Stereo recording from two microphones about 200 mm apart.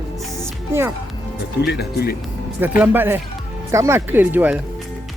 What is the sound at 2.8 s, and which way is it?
Speech, 10° right (ahead or behind).